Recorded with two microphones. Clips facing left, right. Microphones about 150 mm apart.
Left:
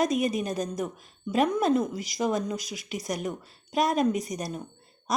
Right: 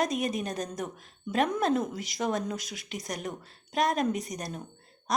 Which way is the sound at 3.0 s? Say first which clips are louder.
Left 4 dB; 45° right (ahead or behind).